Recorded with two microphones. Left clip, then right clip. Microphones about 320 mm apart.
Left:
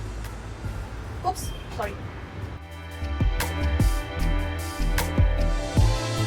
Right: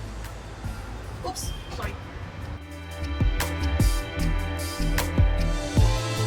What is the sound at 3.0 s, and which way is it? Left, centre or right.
Music, centre.